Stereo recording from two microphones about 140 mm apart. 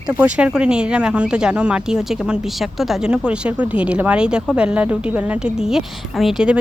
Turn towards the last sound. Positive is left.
turn(degrees=-5)  # may be behind; listen again after turning